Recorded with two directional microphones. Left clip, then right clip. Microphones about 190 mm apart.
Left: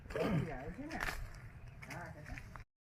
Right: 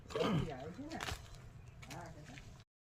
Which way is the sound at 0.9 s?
10° left (ahead or behind).